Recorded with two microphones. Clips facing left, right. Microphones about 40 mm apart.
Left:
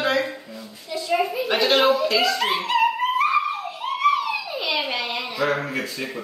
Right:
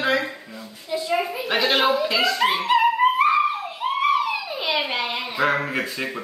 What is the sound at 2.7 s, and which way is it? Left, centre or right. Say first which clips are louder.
Music: right 3 dB; centre.